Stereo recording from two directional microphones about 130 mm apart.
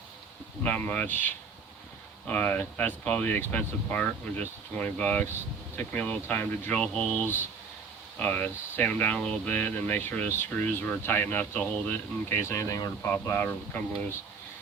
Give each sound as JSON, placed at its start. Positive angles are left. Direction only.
{"t": 0.6, "sound": "speech", "side_deg": 10}